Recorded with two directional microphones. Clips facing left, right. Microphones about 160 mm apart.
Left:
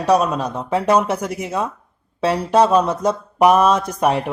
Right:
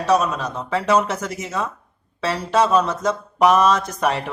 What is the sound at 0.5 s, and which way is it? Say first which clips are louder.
Speech: left 1 dB; 10° left (ahead or behind).